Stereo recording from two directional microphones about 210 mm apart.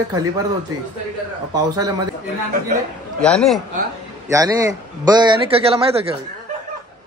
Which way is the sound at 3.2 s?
5° left (ahead or behind).